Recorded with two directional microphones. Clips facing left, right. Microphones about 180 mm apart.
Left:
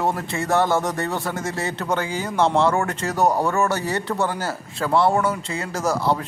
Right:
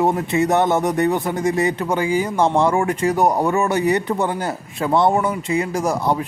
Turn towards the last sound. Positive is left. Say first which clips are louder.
# right 2 dB
turn(degrees=-15)  # may be behind; listen again after turning